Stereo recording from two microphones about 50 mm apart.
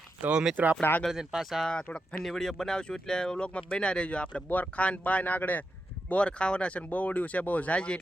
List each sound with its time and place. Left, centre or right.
0.2 s speech: right
0.5 s speech: right
1.1 s speech: centre
1.4 s speech: centre; by 4.4 s left
4.4 s speech: left
6.1 s speech: left